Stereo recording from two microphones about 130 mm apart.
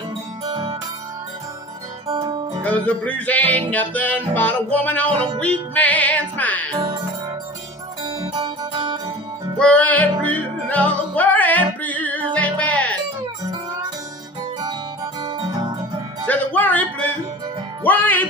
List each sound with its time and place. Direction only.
2.0 s music: 30° right (ahead or behind)
2.6 s music: 10° left (ahead or behind)
6.7 s music: 35° right (ahead or behind)
8.2 s music: 50° right (ahead or behind)
9.6 s music: 10° left (ahead or behind)
15.2 s guitar: 30° right (ahead or behind)
16.3 s music: 10° left (ahead or behind)
17.8 s music: 15° left (ahead or behind)